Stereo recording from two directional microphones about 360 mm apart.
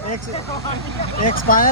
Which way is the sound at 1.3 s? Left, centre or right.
Left.